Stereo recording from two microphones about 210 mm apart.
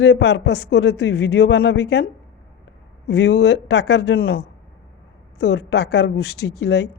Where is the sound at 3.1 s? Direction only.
55° left (ahead or behind).